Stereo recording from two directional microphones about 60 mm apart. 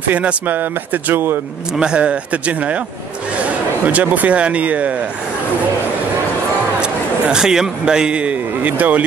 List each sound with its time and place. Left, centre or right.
0.1 s speech: right
1.8 s speech: centre
3.8 s speech: right
6.8 s a man's voice: centre